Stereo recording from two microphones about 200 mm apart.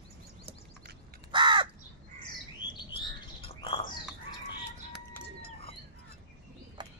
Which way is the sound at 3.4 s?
25° left (ahead or behind).